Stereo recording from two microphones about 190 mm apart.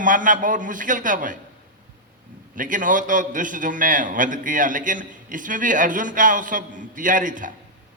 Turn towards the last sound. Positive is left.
turn(degrees=-45)  # may be behind; listen again after turning